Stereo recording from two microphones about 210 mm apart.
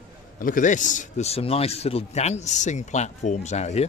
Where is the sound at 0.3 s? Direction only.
40° left (ahead or behind).